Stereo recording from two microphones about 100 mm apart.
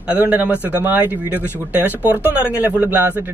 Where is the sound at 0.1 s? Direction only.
15° right (ahead or behind).